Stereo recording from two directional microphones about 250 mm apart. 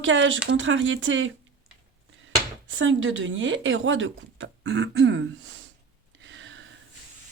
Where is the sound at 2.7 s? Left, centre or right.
Right.